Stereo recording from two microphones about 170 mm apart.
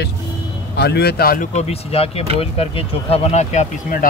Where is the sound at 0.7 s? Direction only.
75° left (ahead or behind).